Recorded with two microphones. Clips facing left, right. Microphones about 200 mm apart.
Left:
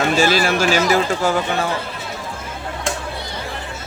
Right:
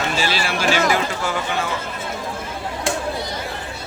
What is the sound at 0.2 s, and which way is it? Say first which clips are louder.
Speech: left 6 dB; 45° left (ahead or behind).